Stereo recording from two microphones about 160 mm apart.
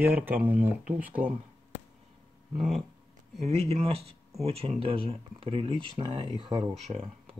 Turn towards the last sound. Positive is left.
turn(degrees=0)  # may be behind; listen again after turning